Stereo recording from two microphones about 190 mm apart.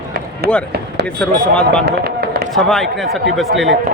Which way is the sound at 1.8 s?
55° right (ahead or behind).